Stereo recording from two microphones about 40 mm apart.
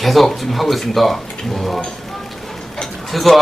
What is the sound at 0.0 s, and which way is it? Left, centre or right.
A man's voice, centre.